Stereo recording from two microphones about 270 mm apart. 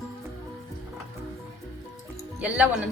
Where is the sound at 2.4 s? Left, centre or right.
Centre.